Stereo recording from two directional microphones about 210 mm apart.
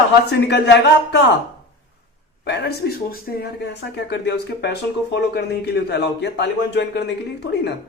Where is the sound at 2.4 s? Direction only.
50° left (ahead or behind).